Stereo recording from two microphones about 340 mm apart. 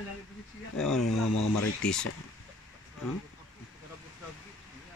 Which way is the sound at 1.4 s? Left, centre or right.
Left.